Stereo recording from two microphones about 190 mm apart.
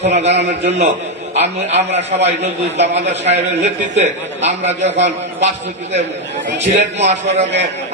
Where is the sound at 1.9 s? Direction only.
70° right (ahead or behind).